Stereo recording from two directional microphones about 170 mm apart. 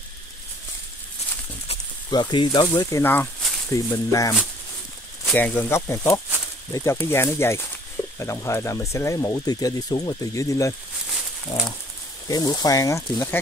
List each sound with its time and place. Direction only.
1.7 s snake: 25° left (ahead or behind)
2.7 s speech: 15° left (ahead or behind)
5.2 s speech: 5° left (ahead or behind)
11.1 s a sound: 5° right (ahead or behind)
12.3 s speech: 25° left (ahead or behind)